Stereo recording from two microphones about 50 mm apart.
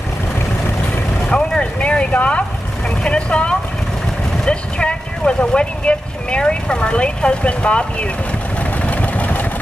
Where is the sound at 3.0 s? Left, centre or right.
Left.